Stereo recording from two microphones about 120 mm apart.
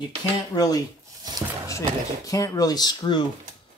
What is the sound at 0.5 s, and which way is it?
Speech, 30° left (ahead or behind).